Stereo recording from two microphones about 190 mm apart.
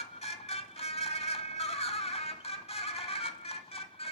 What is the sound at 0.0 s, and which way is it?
Music, 35° left (ahead or behind).